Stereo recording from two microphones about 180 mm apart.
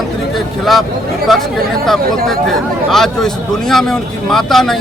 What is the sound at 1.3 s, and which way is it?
Speech, centre (ahead or behind).